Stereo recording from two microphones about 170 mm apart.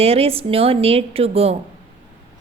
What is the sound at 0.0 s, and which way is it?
A woman's voice, 35° right (ahead or behind).